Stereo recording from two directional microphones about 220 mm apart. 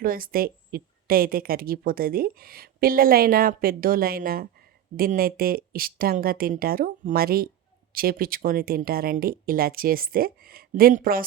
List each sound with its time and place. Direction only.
0.0 s a woman's voice: 40° right (ahead or behind)